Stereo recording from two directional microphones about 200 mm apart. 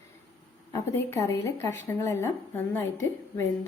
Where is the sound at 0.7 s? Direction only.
15° left (ahead or behind).